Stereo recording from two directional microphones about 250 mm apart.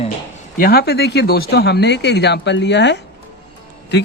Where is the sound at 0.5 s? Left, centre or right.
Left.